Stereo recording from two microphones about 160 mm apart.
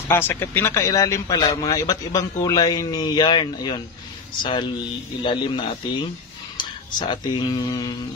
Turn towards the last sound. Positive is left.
turn(degrees=25)  # may be behind; listen again after turning